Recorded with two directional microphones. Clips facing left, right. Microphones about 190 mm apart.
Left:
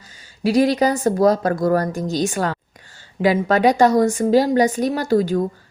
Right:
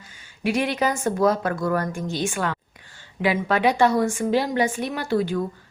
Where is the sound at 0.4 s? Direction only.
35° left (ahead or behind).